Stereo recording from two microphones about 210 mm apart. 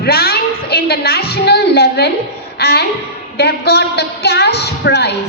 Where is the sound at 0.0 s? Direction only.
50° left (ahead or behind).